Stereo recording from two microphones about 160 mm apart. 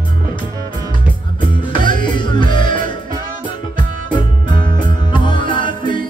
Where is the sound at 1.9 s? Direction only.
30° left (ahead or behind).